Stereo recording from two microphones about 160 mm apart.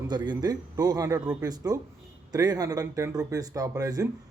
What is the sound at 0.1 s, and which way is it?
Speech, 25° right (ahead or behind).